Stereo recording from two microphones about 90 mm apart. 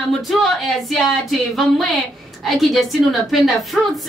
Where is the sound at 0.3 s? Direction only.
Centre (ahead or behind).